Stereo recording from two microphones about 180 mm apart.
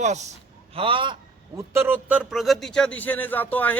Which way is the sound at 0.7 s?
30° right (ahead or behind).